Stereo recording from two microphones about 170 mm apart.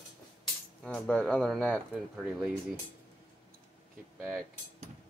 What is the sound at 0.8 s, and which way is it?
Speech, 5° left (ahead or behind).